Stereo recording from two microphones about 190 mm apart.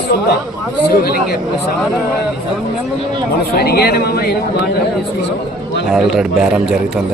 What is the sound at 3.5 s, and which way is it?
Speech, 55° left (ahead or behind).